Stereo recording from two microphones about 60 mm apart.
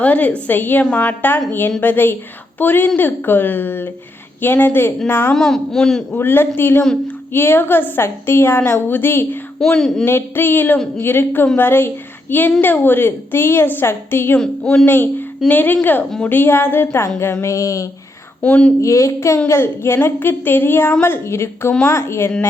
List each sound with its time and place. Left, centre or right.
0.0 s a woman's voice: left
5.3 s a woman's voice: centre
6.1 s a woman's voice: left
9.6 s speech: centre
10.1 s a woman's voice: left
14.3 s speech: centre
14.8 s a woman's voice: left
17.4 s speech: left
18.4 s a woman's voice: left
18.8 s speech: left
19.5 s a woman's voice: left